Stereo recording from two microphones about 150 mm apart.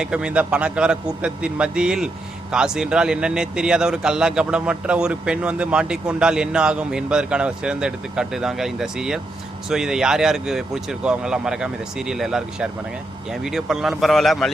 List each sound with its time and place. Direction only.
0.0 s a man's voice: 5° right (ahead or behind)